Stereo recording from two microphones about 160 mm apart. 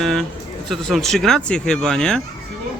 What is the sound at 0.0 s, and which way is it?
Speech, centre (ahead or behind).